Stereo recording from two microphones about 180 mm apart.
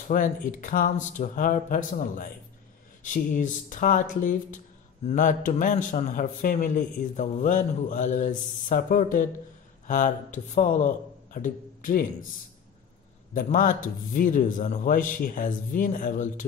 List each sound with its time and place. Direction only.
0.1 s a man's voice: 50° left (ahead or behind)
13.3 s a man's voice: 50° left (ahead or behind)